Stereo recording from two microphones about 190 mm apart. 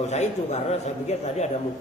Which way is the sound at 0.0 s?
35° left (ahead or behind).